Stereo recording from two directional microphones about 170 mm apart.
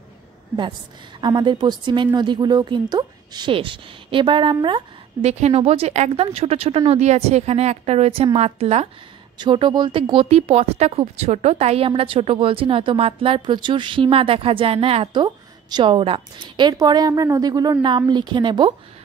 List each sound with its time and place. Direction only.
1.2 s speech: 25° right (ahead or behind)